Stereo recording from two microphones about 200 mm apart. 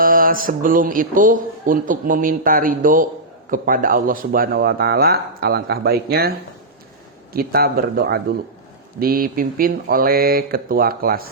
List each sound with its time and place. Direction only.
0.0 s speech: 45° right (ahead or behind)
7.3 s speech: 50° right (ahead or behind)